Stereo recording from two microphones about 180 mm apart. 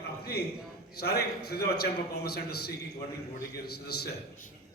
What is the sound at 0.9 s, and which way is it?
A man's voice, 60° left (ahead or behind).